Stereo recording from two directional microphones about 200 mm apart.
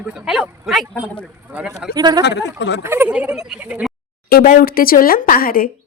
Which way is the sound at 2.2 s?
60° left (ahead or behind).